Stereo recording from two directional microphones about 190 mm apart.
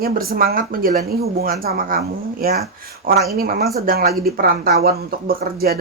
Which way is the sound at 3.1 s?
50° right (ahead or behind).